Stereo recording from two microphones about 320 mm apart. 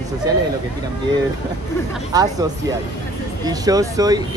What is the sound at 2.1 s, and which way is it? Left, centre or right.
Speech, centre.